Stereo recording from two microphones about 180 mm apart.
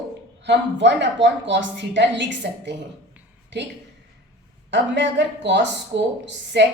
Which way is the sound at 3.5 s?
75° right (ahead or behind).